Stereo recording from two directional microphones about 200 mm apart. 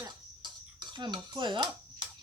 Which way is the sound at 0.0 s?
20° right (ahead or behind).